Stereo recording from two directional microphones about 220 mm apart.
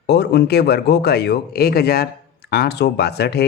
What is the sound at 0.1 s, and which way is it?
Speech, 50° left (ahead or behind).